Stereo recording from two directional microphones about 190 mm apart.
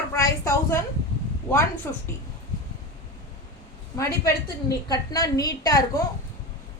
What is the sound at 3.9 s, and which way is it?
A woman's voice, 15° left (ahead or behind).